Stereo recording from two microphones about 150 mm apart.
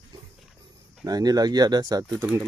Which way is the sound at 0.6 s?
25° right (ahead or behind).